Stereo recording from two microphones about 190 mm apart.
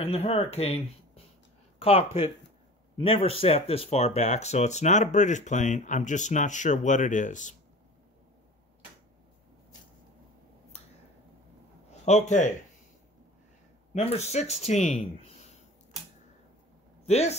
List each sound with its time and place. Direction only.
0.0 s speech: 30° left (ahead or behind)
11.9 s a man's voice: 35° left (ahead or behind)
13.9 s speech: 35° left (ahead or behind)
15.0 s a sound: 30° left (ahead or behind)
17.0 s speech: 35° left (ahead or behind)